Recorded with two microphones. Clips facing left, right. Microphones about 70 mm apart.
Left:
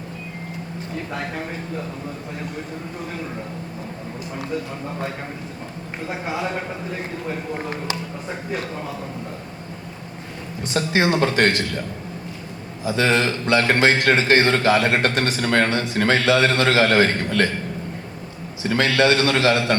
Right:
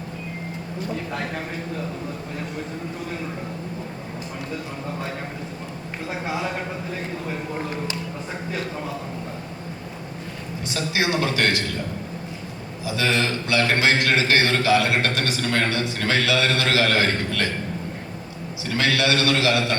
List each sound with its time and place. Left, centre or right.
10.8 s a man's voice: left
12.8 s a man's voice: left
18.6 s a man's voice: left